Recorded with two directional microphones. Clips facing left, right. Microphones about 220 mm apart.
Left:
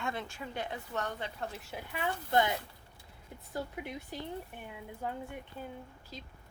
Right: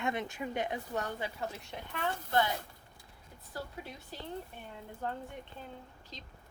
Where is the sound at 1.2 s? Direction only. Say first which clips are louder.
Right 1 dB; centre (ahead or behind); by 2.5 s 15° left (ahead or behind).